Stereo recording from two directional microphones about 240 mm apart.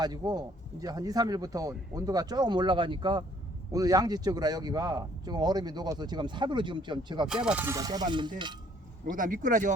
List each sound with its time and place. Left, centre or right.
0.0 s speech: centre
7.3 s speech: centre
9.0 s speech: right